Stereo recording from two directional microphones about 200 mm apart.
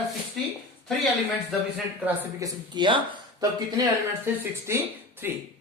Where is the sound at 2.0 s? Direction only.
20° right (ahead or behind).